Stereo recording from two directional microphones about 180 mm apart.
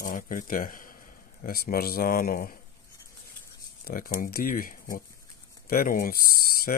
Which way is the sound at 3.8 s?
50° left (ahead or behind).